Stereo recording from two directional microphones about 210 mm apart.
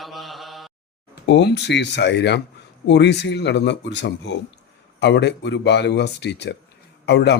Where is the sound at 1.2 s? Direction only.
55° left (ahead or behind).